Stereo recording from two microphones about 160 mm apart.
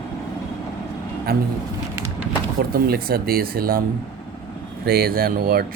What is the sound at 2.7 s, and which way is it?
Speech, 70° right (ahead or behind).